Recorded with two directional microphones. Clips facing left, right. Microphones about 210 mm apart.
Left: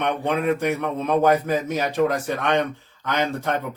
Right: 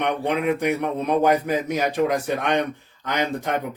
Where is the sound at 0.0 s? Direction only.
15° right (ahead or behind).